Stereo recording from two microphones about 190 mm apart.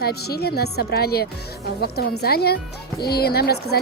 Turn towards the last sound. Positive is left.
turn(degrees=55)  # may be behind; listen again after turning